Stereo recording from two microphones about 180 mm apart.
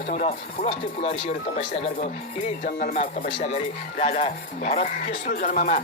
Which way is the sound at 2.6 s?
50° left (ahead or behind).